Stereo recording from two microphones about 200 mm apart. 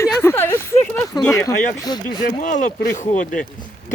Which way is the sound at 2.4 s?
40° left (ahead or behind).